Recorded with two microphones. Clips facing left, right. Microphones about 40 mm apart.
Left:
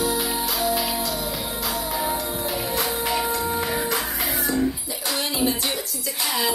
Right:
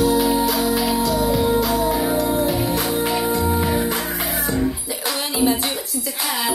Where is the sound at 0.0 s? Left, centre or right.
Centre.